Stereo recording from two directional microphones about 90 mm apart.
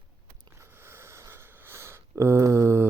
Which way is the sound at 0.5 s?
30° right (ahead or behind).